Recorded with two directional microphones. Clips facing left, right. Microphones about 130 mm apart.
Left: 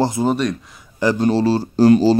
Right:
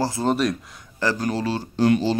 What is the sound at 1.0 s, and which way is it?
Speech, 30° left (ahead or behind).